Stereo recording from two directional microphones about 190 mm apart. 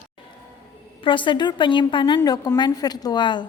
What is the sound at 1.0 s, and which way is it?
A woman's voice, 25° left (ahead or behind).